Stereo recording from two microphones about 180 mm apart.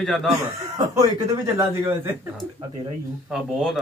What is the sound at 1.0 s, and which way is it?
Speech, 20° right (ahead or behind).